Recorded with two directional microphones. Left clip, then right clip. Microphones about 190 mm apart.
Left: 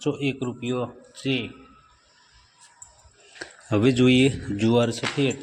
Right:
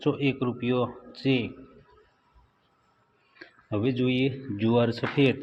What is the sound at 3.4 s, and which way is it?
Speech, 50° left (ahead or behind).